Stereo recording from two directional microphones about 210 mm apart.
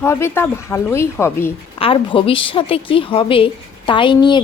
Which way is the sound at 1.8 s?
25° left (ahead or behind).